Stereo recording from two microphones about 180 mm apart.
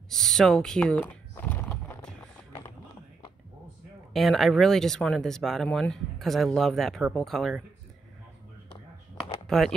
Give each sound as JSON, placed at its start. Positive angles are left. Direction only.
{"t": 0.1, "sound": "a sound", "side_deg": 0}
{"t": 4.1, "sound": "speech", "side_deg": 0}
{"t": 9.5, "sound": "speech", "side_deg": 0}